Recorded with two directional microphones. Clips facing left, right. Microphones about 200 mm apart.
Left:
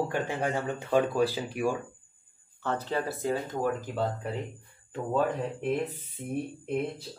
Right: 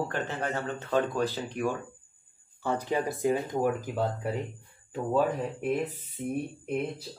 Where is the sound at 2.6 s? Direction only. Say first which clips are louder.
Right 2 dB; 10° right (ahead or behind).